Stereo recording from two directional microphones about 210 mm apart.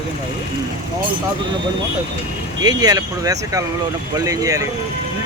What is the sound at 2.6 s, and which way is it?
Speech, 20° right (ahead or behind).